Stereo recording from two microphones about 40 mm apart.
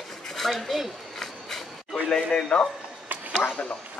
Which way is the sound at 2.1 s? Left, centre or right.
Centre.